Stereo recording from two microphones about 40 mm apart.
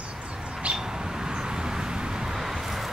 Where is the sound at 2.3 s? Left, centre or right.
Centre.